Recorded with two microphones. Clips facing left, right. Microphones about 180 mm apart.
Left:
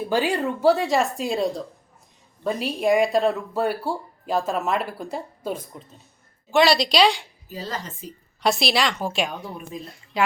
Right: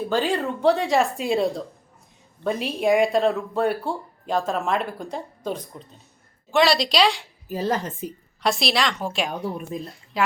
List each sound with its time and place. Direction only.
0.1 s speech: 10° left (ahead or behind)
7.4 s speech: 60° right (ahead or behind)
8.4 s speech: centre (ahead or behind)